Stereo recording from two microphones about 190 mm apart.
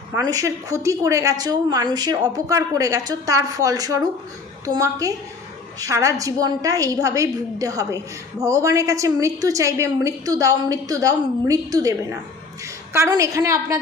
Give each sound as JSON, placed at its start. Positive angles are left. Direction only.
{"t": 0.2, "sound": "a woman's voice", "side_deg": -20}